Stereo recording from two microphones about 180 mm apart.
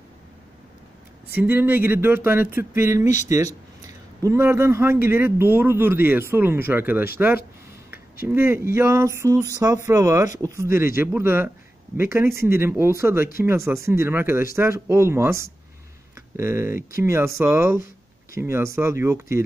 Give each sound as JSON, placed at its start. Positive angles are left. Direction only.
{"t": 1.4, "sound": "speech", "side_deg": -10}
{"t": 8.3, "sound": "speech", "side_deg": -15}